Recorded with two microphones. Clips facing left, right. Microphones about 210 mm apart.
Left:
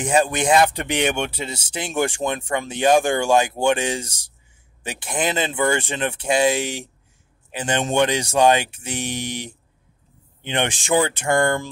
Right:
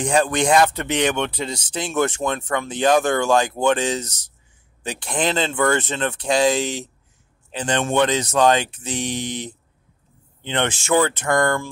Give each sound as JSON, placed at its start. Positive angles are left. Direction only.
{"t": 0.1, "sound": "a man's voice", "side_deg": 5}